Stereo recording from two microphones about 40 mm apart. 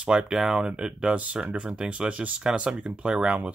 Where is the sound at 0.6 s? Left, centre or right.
Right.